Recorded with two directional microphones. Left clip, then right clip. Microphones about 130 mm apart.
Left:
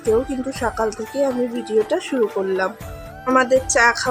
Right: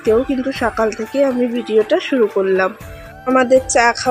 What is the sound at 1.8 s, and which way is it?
Speech, 15° right (ahead or behind).